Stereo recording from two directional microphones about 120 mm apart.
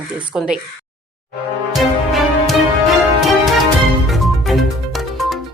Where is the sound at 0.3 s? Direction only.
10° right (ahead or behind).